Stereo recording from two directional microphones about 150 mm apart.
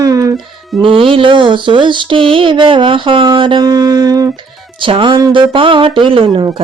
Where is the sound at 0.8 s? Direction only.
35° right (ahead or behind).